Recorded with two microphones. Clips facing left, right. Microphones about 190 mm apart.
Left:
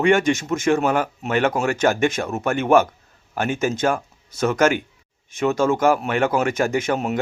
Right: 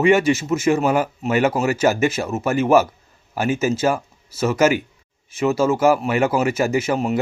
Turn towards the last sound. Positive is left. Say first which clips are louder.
# right 2 dB
turn(degrees=0)  # may be behind; listen again after turning